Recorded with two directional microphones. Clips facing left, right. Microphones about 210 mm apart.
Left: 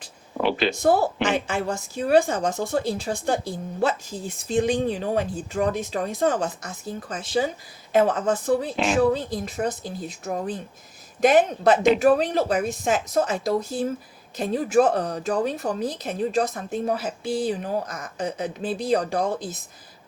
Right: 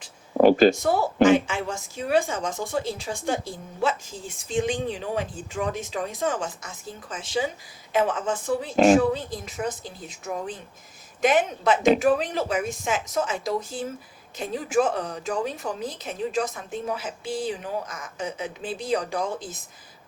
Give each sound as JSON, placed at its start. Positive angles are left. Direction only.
{"t": 0.3, "sound": "a sound", "side_deg": -45}
{"t": 0.8, "sound": "speech", "side_deg": 40}
{"t": 8.7, "sound": "speech", "side_deg": -45}
{"t": 9.0, "sound": "speech", "side_deg": 40}